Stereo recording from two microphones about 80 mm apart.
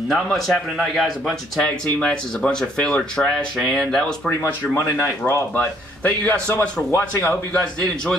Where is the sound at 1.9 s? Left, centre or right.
Centre.